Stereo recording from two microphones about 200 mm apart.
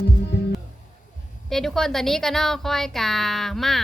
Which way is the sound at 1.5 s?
Centre (ahead or behind).